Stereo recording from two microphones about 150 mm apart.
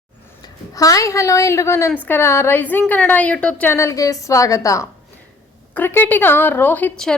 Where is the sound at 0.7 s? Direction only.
25° left (ahead or behind).